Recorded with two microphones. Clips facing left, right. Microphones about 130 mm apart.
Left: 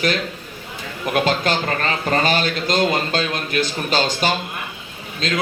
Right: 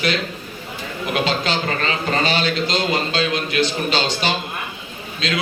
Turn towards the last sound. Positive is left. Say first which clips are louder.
# left 1 dB
turn(degrees=45)  # may be behind; listen again after turning